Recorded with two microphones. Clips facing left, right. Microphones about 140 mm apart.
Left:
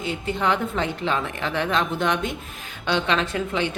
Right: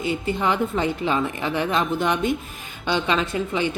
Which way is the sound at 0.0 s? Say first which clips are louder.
Right 2 dB; 5° right (ahead or behind).